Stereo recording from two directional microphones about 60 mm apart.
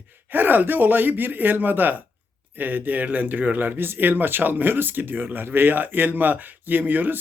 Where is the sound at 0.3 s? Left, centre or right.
Right.